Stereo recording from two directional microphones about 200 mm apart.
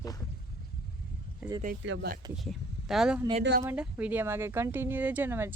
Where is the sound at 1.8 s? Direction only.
65° right (ahead or behind).